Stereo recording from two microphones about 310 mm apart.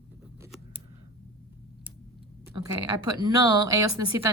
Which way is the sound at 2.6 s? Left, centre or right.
Centre.